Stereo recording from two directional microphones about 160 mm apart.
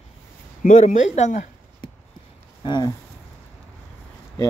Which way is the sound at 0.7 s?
45° left (ahead or behind).